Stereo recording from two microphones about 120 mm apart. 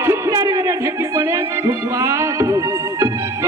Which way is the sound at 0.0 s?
25° right (ahead or behind).